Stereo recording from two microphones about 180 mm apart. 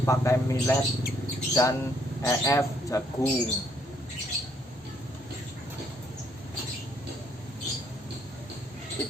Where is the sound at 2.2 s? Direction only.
15° left (ahead or behind).